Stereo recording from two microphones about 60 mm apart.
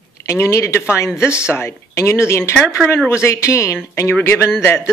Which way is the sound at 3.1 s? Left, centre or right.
Left.